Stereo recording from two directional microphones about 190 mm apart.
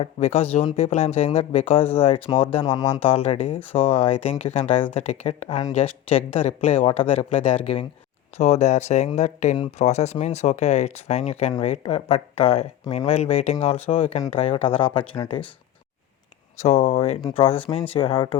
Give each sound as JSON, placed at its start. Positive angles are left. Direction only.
{"t": 0.0, "sound": "speech", "side_deg": 30}
{"t": 16.6, "sound": "speech", "side_deg": 35}